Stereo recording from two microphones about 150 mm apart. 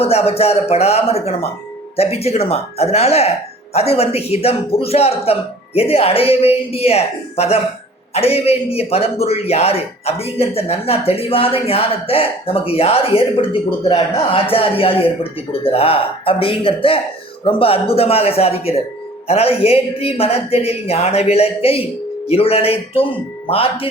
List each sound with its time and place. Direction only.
0.0 s a man's voice: 40° left (ahead or behind)